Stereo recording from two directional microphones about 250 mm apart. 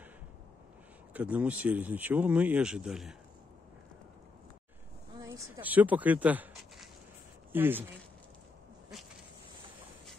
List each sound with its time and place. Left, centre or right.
1.1 s speech: centre
5.2 s speech: centre